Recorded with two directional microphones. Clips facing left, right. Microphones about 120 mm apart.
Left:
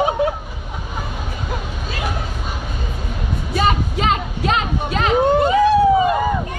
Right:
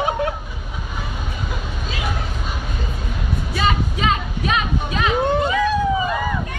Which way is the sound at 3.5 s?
35° left (ahead or behind).